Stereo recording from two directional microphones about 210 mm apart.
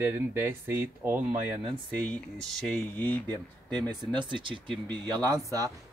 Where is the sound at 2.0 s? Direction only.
5° left (ahead or behind).